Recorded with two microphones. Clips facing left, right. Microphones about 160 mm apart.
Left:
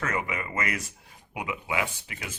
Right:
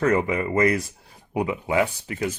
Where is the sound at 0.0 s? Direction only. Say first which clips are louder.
Right 10 dB; 35° right (ahead or behind).